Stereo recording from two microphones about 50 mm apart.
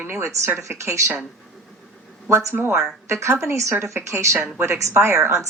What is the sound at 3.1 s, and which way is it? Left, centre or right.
A woman's voice, right.